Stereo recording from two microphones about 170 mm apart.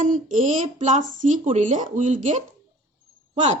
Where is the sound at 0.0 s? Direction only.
50° right (ahead or behind).